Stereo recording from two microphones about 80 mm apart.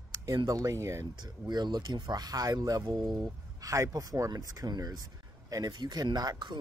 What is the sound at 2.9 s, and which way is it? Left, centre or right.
Speech, right.